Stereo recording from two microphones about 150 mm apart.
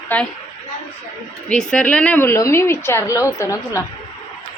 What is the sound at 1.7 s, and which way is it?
A woman's voice, 10° left (ahead or behind).